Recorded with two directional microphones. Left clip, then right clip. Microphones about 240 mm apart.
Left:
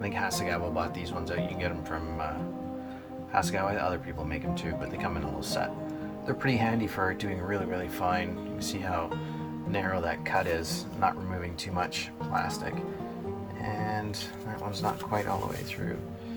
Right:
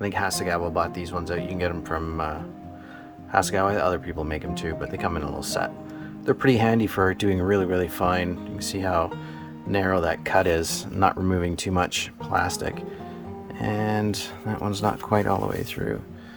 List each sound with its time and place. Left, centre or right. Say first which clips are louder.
0.0 s speech: right 5 dB; right
3.3 s speech: right 7 dB; right